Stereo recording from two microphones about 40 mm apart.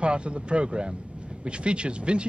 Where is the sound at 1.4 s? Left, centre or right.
Right.